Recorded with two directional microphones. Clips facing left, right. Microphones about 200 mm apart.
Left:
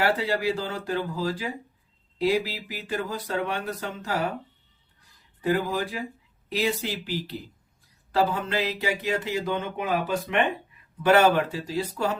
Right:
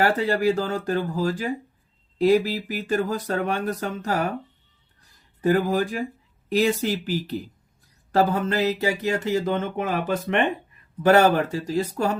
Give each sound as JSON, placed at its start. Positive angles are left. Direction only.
{"t": 0.0, "sound": "speech", "side_deg": -45}
{"t": 5.4, "sound": "speech", "side_deg": -45}
{"t": 8.1, "sound": "speech", "side_deg": -45}